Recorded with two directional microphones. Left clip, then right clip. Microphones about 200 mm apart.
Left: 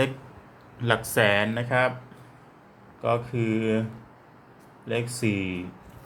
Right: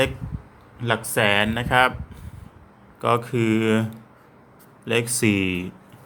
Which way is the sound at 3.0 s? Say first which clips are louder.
Right 5 dB; 40° right (ahead or behind).